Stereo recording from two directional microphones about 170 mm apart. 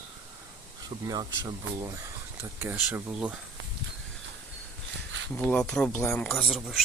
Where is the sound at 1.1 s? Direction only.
25° right (ahead or behind).